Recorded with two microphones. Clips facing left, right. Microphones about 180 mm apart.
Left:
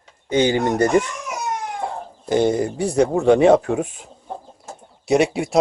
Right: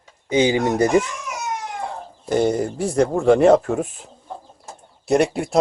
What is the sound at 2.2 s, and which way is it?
Speech, centre (ahead or behind).